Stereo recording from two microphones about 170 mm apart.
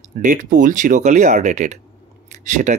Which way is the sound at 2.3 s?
45° right (ahead or behind).